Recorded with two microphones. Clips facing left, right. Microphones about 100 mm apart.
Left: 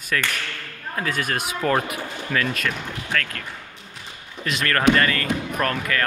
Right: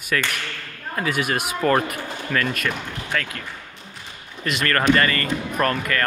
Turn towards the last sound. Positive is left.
turn(degrees=0)  # may be behind; listen again after turning